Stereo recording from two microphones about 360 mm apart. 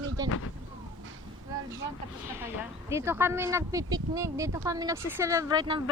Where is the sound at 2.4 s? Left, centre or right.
Centre.